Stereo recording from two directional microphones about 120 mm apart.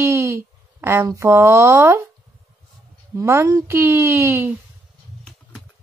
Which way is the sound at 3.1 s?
25° right (ahead or behind).